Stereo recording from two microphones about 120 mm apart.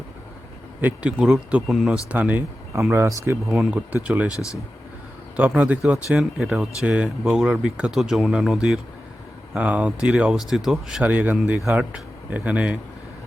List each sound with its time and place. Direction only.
0.8 s speech: 15° right (ahead or behind)
3.4 s speech: centre (ahead or behind)
4.0 s speech: 15° right (ahead or behind)
4.3 s speech: 25° left (ahead or behind)
5.4 s speech: 10° right (ahead or behind)